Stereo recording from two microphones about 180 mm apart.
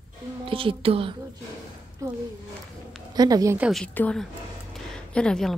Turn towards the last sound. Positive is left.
turn(degrees=5)  # may be behind; listen again after turning